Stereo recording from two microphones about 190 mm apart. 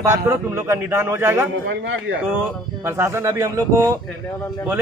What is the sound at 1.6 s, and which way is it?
Speech, 75° right (ahead or behind).